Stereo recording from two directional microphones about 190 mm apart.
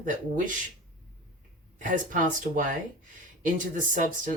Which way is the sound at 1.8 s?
45° right (ahead or behind).